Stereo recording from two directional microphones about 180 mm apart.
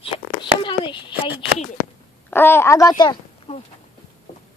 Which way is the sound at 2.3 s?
10° left (ahead or behind).